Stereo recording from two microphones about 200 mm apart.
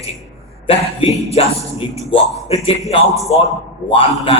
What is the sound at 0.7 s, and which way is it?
A man's voice, 30° left (ahead or behind).